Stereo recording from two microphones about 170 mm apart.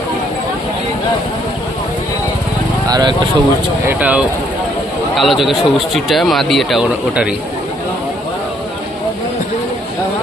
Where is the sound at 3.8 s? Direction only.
10° right (ahead or behind).